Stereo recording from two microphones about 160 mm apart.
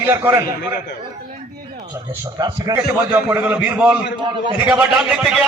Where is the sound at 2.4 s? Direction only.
25° right (ahead or behind).